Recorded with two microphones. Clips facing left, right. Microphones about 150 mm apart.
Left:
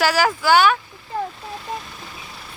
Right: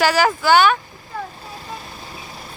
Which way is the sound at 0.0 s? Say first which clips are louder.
Right 2 dB; 5° left (ahead or behind).